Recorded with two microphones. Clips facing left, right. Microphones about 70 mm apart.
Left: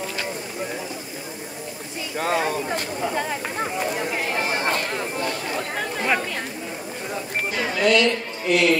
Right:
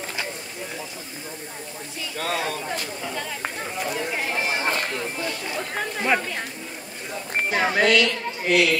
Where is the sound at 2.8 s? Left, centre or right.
Left.